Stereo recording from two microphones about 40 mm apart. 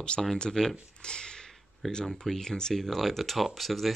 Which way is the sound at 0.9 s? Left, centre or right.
Left.